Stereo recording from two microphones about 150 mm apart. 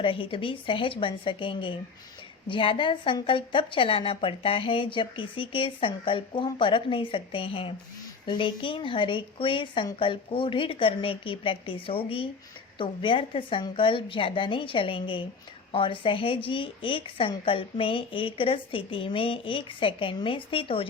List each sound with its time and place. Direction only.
0.0 s a woman's voice: 35° left (ahead or behind)